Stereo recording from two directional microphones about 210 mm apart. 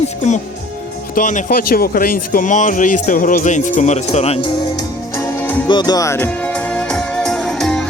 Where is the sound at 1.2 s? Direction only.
45° left (ahead or behind).